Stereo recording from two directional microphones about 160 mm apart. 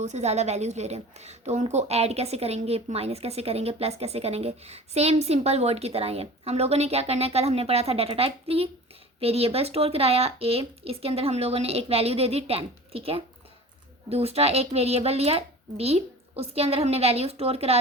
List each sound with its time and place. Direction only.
0.0 s a woman's voice: 45° right (ahead or behind)